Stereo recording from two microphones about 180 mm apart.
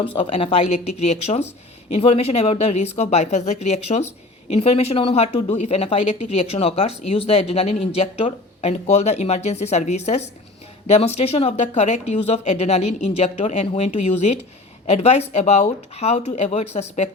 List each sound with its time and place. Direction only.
0.0 s speech: 30° left (ahead or behind)